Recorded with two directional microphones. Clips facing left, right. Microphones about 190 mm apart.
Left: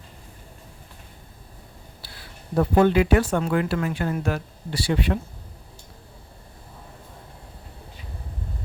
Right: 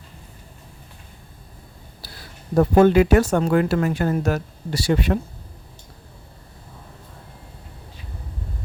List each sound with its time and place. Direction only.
2.0 s speech: 40° right (ahead or behind)